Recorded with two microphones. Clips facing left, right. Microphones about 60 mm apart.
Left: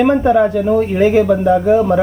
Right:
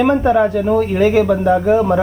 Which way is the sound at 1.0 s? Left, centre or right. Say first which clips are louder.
Left 2 dB; left.